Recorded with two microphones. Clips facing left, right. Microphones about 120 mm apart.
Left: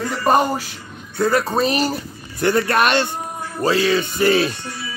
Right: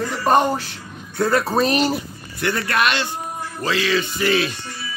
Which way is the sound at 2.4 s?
35° left (ahead or behind).